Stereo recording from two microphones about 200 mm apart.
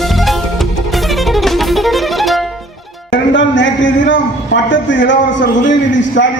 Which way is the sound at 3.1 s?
65° left (ahead or behind).